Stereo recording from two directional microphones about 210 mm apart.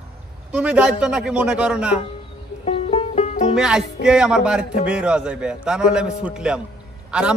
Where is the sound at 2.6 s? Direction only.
30° left (ahead or behind).